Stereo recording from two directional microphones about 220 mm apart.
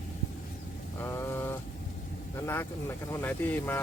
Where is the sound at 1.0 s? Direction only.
10° left (ahead or behind).